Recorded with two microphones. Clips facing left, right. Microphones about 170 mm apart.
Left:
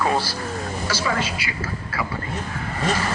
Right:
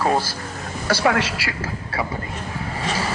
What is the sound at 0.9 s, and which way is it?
Speech, 65° right (ahead or behind).